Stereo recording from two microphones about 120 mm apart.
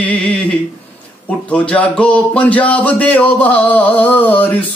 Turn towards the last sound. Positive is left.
turn(degrees=15)  # may be behind; listen again after turning